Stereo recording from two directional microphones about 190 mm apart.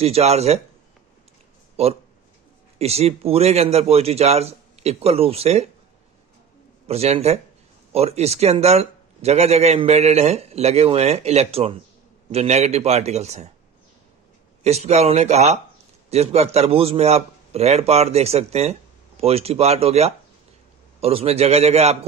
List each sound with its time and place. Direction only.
0.0 s a man's voice: 35° right (ahead or behind)
1.8 s a man's voice: 35° right (ahead or behind)
6.9 s a man's voice: 35° right (ahead or behind)
14.6 s a man's voice: 35° right (ahead or behind)